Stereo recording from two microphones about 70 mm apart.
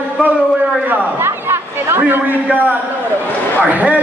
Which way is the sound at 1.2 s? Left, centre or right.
Right.